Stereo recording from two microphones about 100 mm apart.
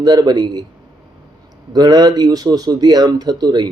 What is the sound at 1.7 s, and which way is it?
Speech, 45° right (ahead or behind).